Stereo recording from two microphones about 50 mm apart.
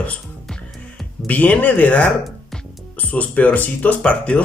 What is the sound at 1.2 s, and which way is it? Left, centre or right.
Speech, left.